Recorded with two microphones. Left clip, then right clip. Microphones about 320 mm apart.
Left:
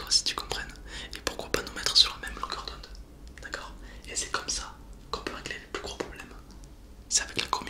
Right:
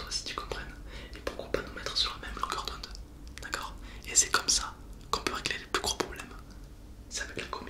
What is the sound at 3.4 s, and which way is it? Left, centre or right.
Whispering, centre.